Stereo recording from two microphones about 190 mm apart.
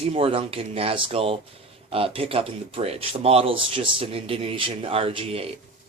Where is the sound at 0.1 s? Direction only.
30° right (ahead or behind).